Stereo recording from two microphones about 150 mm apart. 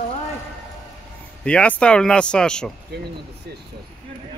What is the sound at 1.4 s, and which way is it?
Speech, 5° left (ahead or behind).